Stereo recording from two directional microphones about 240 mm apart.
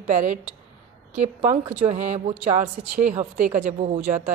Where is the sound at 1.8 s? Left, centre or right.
Right.